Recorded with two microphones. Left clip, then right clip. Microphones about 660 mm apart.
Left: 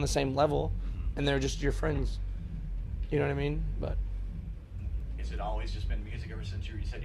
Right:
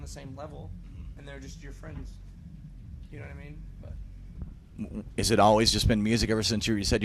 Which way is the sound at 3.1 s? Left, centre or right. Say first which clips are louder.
Left 17 dB; left.